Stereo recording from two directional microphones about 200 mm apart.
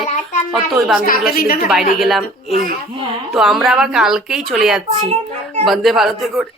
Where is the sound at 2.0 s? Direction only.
Centre (ahead or behind).